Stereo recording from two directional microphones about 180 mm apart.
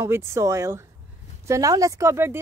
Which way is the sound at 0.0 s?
15° right (ahead or behind).